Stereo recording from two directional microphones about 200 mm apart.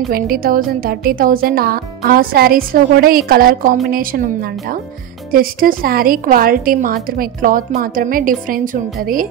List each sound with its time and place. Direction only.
0.1 s speech: 45° right (ahead or behind)